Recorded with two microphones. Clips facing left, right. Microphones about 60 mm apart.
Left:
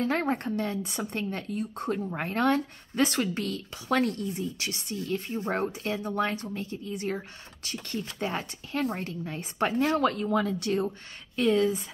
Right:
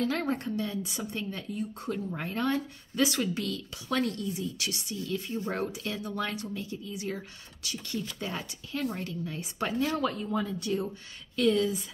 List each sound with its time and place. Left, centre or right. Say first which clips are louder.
0.0 s a woman's voice: left 2 dB; left
4.8 s speech: left 4 dB; left
10.1 s speech: left 5 dB; left
11.3 s speech: left 2 dB; left